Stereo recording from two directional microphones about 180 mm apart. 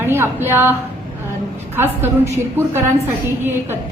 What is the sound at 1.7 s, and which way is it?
Speech, 10° right (ahead or behind).